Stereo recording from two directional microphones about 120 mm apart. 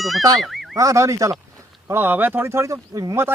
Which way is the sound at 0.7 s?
25° right (ahead or behind).